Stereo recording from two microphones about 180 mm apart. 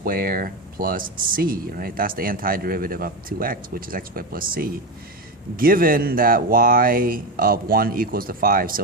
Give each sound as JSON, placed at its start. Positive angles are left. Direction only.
{"t": 0.0, "sound": "speech", "side_deg": -55}